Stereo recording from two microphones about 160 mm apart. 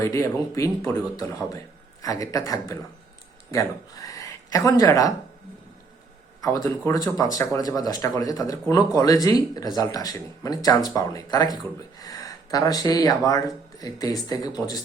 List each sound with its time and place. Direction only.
0.0 s speech: 20° left (ahead or behind)
6.4 s speech: 20° left (ahead or behind)